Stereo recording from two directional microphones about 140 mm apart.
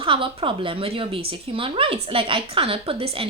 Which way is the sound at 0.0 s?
40° right (ahead or behind).